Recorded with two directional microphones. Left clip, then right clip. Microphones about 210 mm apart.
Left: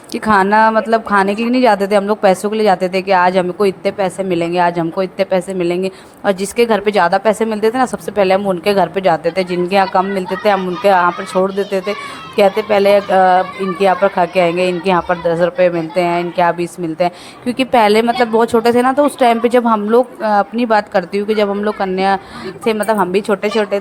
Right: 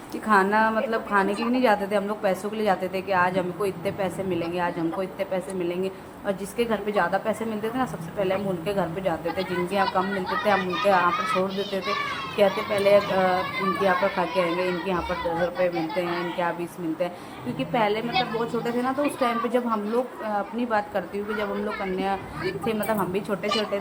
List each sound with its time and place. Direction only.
0.1 s speech: 45° left (ahead or behind)